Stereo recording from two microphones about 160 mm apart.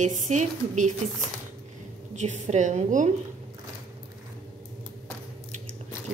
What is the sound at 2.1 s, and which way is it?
Speech, 45° right (ahead or behind).